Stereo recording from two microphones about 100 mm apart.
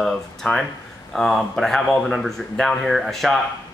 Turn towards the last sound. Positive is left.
turn(degrees=0)  # may be behind; listen again after turning